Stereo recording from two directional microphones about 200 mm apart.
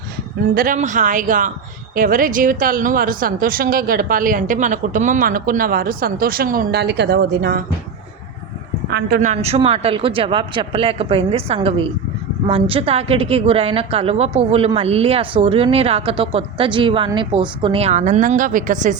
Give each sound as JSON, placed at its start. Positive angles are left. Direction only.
{"t": 0.5, "sound": "speech", "side_deg": -45}
{"t": 8.9, "sound": "speech", "side_deg": -50}
{"t": 9.2, "sound": "a woman's voice", "side_deg": -30}